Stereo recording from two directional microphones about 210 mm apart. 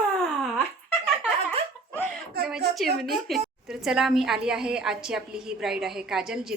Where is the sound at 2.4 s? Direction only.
45° right (ahead or behind).